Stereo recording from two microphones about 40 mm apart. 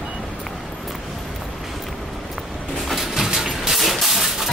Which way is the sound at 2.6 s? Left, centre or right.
Centre.